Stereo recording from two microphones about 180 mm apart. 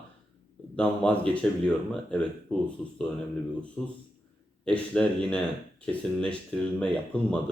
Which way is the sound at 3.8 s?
5° left (ahead or behind).